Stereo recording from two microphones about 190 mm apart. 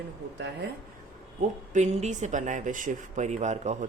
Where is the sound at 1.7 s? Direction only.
40° right (ahead or behind).